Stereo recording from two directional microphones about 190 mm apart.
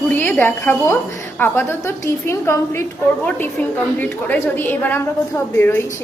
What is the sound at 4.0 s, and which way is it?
A woman's voice, 10° left (ahead or behind).